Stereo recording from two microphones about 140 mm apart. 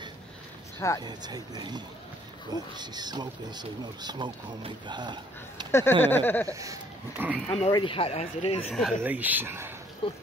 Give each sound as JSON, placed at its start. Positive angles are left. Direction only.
{"t": 0.7, "sound": "speech", "side_deg": 20}
{"t": 1.0, "sound": "speech", "side_deg": -30}
{"t": 5.7, "sound": "speech", "side_deg": 15}
{"t": 6.4, "sound": "speech", "side_deg": -25}
{"t": 7.2, "sound": "speech", "side_deg": -10}
{"t": 7.7, "sound": "speech", "side_deg": 40}
{"t": 8.6, "sound": "speech", "side_deg": 0}
{"t": 9.0, "sound": "speech", "side_deg": -10}
{"t": 10.0, "sound": "speech", "side_deg": 40}